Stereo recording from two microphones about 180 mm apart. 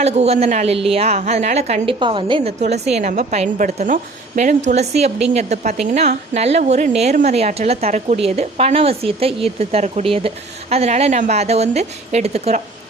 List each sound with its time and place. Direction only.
0.0 s a woman's voice: 35° right (ahead or behind)